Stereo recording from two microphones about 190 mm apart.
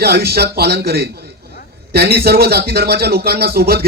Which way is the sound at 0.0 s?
55° right (ahead or behind).